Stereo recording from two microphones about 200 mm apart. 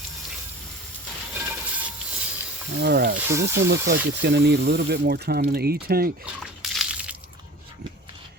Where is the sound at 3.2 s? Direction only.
15° right (ahead or behind).